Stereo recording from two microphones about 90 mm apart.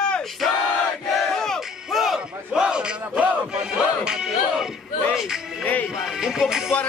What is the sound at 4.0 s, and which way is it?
Music, 5° right (ahead or behind).